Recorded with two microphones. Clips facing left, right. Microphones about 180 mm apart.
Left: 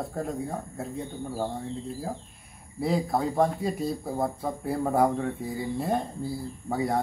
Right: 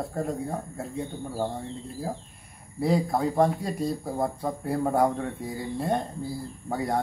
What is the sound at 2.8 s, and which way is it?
A man's voice, centre (ahead or behind).